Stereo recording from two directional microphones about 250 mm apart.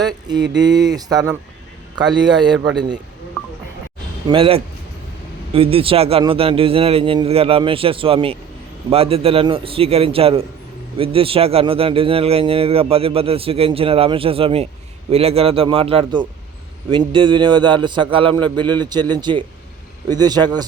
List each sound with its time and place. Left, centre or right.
0.0 s a sound: centre
0.6 s speech: centre
4.3 s a man's voice: right